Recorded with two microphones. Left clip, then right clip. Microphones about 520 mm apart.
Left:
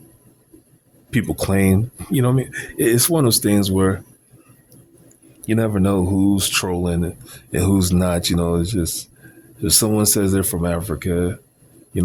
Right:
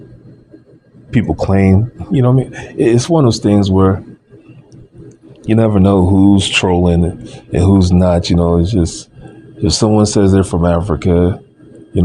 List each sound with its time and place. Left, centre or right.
1.1 s speech: left
5.4 s speech: left